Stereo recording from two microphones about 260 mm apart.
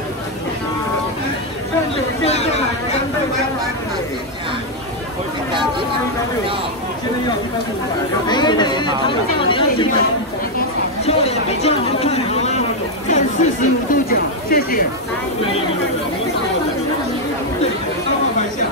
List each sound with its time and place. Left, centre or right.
2.2 s chatter: left
8.3 s speech: centre
11.1 s chatter: left